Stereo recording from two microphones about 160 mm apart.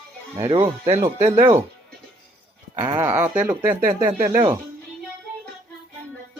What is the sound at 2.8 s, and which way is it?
Speech, 15° right (ahead or behind).